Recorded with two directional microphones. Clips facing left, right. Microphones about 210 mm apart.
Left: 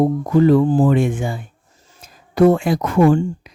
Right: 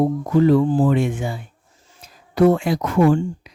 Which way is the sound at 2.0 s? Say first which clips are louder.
Left 2 dB; 50° left (ahead or behind).